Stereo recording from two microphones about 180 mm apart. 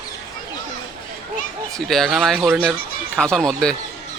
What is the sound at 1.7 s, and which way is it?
Speech, centre (ahead or behind).